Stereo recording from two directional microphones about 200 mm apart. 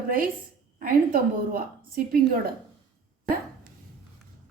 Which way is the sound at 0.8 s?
45° right (ahead or behind).